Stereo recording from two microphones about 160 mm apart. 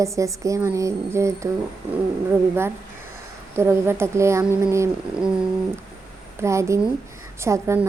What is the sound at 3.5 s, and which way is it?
Speech, 15° right (ahead or behind).